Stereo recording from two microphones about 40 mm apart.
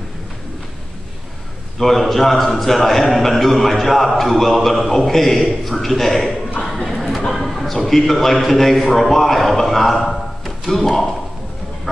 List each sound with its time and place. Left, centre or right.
1.8 s a man's voice: centre
6.6 s a sound: centre
7.2 s a man's voice: centre